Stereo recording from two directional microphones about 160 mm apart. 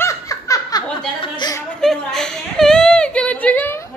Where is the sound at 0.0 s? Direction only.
20° left (ahead or behind).